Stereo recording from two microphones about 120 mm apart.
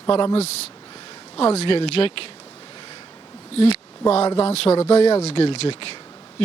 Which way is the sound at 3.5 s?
60° left (ahead or behind).